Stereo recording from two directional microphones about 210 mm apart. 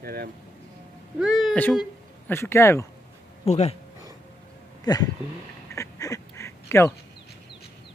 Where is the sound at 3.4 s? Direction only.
30° left (ahead or behind).